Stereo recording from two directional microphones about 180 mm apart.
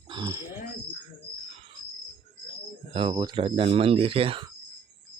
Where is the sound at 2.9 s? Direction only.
30° right (ahead or behind).